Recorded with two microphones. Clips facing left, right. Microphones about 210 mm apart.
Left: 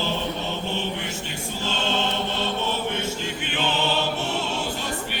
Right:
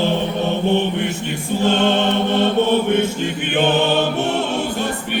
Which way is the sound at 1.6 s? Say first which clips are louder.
Right 10 dB; 55° right (ahead or behind).